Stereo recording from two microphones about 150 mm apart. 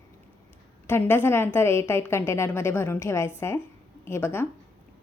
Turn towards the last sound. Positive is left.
turn(degrees=15)  # may be behind; listen again after turning